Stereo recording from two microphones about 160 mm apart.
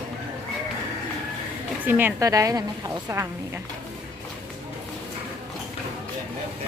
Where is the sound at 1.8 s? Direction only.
10° right (ahead or behind).